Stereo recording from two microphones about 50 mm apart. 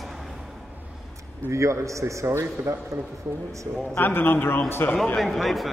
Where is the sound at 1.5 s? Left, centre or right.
Right.